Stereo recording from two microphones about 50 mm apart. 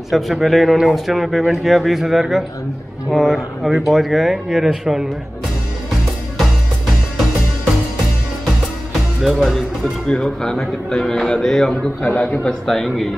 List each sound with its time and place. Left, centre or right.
0.1 s a man's voice: centre
9.2 s a man's voice: centre
12.0 s a man's voice: left
12.4 s speech: centre